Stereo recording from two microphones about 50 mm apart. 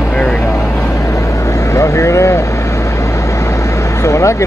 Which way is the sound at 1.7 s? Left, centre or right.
Left.